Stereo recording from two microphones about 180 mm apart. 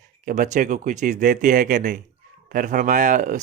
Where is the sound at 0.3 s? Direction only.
45° right (ahead or behind).